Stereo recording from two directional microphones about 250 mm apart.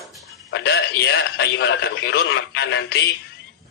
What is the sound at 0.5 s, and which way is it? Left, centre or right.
A man's voice, left.